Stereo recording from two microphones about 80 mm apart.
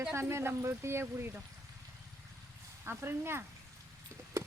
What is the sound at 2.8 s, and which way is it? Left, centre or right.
Speech, right.